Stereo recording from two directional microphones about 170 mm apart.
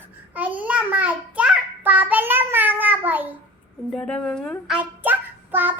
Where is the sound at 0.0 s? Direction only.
10° right (ahead or behind).